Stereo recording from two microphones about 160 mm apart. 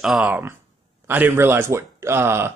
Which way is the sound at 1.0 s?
15° right (ahead or behind).